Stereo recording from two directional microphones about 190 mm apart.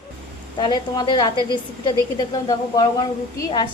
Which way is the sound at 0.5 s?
25° left (ahead or behind).